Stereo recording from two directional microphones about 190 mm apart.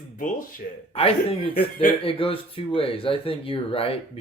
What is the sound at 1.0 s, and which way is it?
Speech, 30° left (ahead or behind).